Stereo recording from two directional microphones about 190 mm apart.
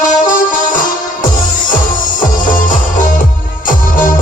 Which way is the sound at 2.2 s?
45° left (ahead or behind).